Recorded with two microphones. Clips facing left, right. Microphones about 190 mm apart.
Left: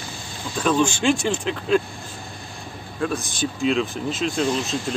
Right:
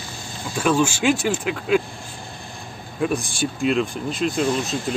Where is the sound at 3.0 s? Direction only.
15° right (ahead or behind).